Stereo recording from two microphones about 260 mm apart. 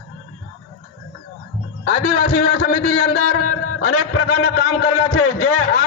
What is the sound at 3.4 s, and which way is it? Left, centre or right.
A man's voice, left.